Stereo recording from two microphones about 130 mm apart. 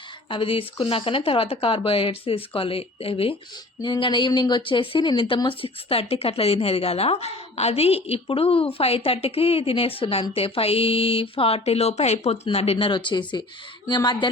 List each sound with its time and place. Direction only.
0.3 s speech: 45° left (ahead or behind)